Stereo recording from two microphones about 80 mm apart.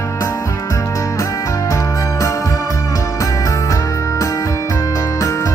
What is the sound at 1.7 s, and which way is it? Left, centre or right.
Music, left.